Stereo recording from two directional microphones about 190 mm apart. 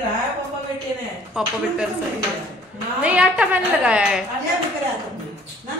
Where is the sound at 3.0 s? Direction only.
5° right (ahead or behind).